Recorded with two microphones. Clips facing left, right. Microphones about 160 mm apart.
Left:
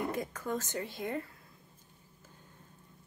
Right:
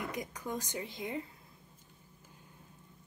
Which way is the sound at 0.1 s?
15° right (ahead or behind).